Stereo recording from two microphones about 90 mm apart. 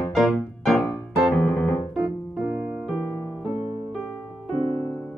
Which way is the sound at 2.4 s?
20° right (ahead or behind).